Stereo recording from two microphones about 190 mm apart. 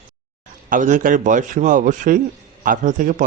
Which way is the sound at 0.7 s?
40° right (ahead or behind).